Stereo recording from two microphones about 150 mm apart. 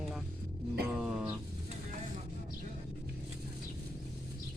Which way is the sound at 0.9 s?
5° right (ahead or behind).